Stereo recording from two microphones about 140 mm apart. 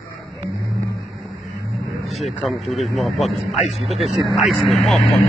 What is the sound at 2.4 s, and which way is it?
A man's voice, centre (ahead or behind).